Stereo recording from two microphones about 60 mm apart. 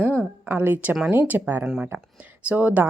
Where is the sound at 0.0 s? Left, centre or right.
Right.